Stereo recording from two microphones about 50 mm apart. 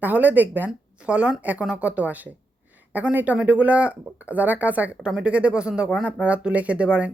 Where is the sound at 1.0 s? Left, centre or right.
Right.